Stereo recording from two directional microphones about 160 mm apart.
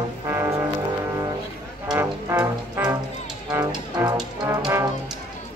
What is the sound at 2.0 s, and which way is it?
Music, 15° right (ahead or behind).